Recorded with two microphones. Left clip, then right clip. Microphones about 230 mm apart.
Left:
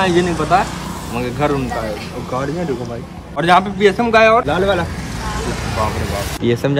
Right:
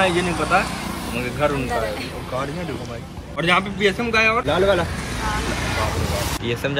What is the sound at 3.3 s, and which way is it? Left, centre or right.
A man's voice, left.